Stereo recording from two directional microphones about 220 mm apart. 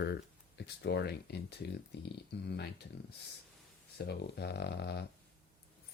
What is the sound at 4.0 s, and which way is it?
Speech, 50° left (ahead or behind).